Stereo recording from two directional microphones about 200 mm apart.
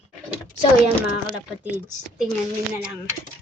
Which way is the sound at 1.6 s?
10° right (ahead or behind).